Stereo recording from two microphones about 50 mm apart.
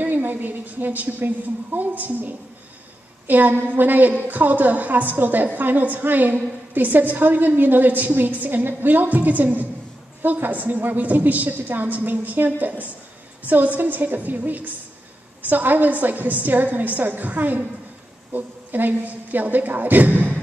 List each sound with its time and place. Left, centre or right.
0.0 s a woman's voice: right